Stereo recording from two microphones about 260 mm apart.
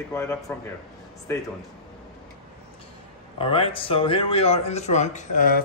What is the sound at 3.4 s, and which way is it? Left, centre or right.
Speech, left.